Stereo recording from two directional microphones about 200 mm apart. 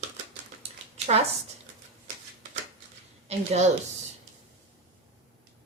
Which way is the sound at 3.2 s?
35° right (ahead or behind).